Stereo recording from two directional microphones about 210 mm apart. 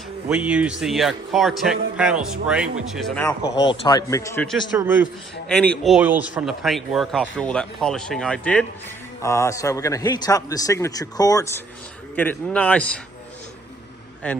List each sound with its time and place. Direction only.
0.3 s speech: 5° right (ahead or behind)
3.7 s a man's voice: 20° left (ahead or behind)
4.7 s a man's voice: 10° right (ahead or behind)
5.5 s a man's voice: 5° left (ahead or behind)
14.2 s speech: 5° left (ahead or behind)